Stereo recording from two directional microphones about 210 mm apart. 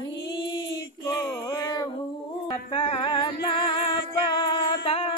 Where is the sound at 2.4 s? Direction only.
25° left (ahead or behind).